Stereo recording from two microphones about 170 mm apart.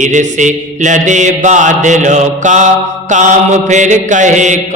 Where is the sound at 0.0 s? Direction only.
45° right (ahead or behind).